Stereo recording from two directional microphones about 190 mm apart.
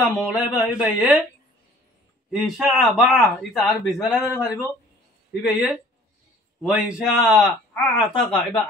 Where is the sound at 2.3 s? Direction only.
Centre (ahead or behind).